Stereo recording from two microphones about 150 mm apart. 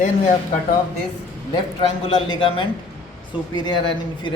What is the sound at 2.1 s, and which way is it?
A man's voice, 30° left (ahead or behind).